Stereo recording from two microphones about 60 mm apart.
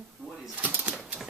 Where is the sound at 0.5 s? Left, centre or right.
Right.